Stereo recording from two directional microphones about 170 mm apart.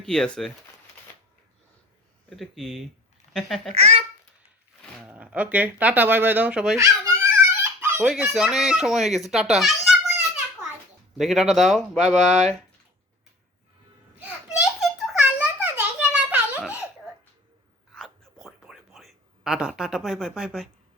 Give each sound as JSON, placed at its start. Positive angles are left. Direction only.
{"t": 0.0, "sound": "speech", "side_deg": 5}
{"t": 2.3, "sound": "speech", "side_deg": 0}
{"t": 3.7, "sound": "a child's voice", "side_deg": -40}
{"t": 5.0, "sound": "speech", "side_deg": -10}
{"t": 6.7, "sound": "a sound", "side_deg": -15}
{"t": 8.0, "sound": "speech", "side_deg": -5}
{"t": 14.8, "sound": "a sound", "side_deg": -5}
{"t": 17.9, "sound": "whispering", "side_deg": 0}